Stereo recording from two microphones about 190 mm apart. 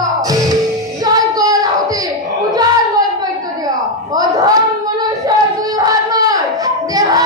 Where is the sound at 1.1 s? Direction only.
20° right (ahead or behind).